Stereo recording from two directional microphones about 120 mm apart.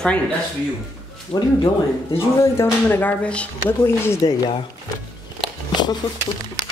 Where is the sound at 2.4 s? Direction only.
20° left (ahead or behind).